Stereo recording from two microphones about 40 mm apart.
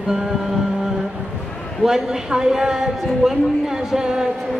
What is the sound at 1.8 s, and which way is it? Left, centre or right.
Speech, centre.